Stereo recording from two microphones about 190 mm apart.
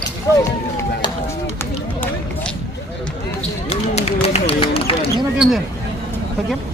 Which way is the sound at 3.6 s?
35° left (ahead or behind).